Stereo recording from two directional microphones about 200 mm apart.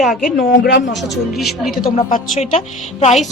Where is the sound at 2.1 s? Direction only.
30° left (ahead or behind).